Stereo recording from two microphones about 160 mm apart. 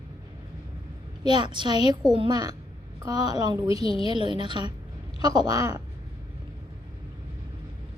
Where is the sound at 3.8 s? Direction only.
35° left (ahead or behind).